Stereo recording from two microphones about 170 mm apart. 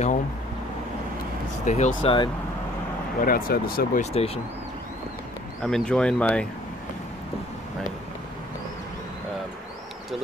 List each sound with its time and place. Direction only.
1.6 s speech: 45° left (ahead or behind)
2.0 s speech: 30° left (ahead or behind)
3.2 s speech: 55° left (ahead or behind)
4.0 s speech: 35° left (ahead or behind)
5.6 s speech: 5° left (ahead or behind)